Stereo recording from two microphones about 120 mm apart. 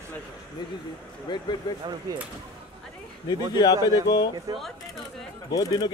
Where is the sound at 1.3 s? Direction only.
35° left (ahead or behind).